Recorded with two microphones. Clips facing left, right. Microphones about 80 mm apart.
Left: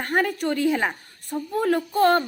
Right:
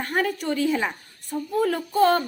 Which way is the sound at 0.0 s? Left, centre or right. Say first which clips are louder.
Left 2 dB; left.